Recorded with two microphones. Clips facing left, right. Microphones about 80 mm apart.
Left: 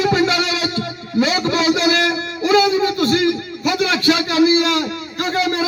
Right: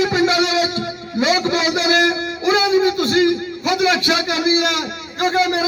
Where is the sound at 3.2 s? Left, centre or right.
Right.